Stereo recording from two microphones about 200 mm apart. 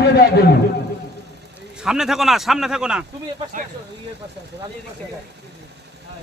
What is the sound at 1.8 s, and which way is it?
A man's voice, centre (ahead or behind).